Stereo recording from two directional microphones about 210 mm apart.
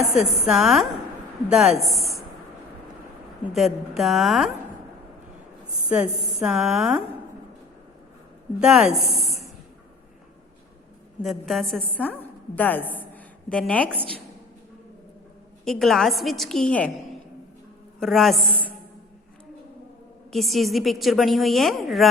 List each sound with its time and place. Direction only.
0.2 s a woman's voice: centre (ahead or behind)
3.4 s a woman's voice: centre (ahead or behind)
5.9 s a woman's voice: 5° right (ahead or behind)
8.6 s a woman's voice: 5° right (ahead or behind)
11.2 s a woman's voice: centre (ahead or behind)
15.6 s a woman's voice: centre (ahead or behind)
18.0 s a woman's voice: centre (ahead or behind)
20.3 s a woman's voice: centre (ahead or behind)